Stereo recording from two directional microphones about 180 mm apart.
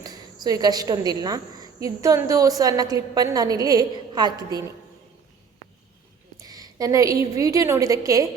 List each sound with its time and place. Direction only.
0.0 s a woman's voice: 20° right (ahead or behind)
6.4 s a woman's voice: 20° right (ahead or behind)